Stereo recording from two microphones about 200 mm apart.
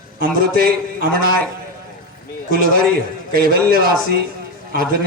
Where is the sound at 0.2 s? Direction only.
50° right (ahead or behind).